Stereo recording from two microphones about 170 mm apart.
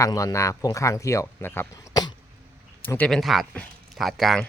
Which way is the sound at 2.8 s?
10° left (ahead or behind).